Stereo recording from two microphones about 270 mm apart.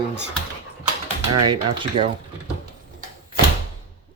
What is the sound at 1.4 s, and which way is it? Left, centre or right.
Speech, centre.